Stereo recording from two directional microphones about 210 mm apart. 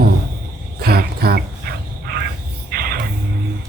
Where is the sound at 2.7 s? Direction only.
45° right (ahead or behind).